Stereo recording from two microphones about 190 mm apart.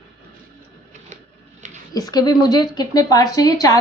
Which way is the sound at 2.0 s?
20° left (ahead or behind).